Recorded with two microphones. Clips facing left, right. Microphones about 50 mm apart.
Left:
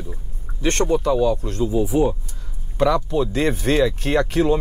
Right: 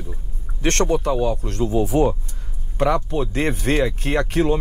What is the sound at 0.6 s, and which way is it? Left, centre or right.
Speech, right.